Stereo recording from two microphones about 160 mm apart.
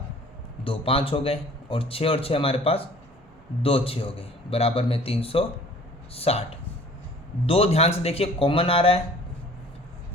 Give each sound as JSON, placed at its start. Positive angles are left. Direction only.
{"t": 0.6, "sound": "a man's voice", "side_deg": 35}